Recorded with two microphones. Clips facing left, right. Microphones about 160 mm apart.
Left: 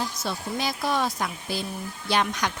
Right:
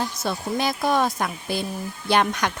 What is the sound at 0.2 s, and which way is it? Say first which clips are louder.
A woman's voice: right 4 dB; 55° right (ahead or behind).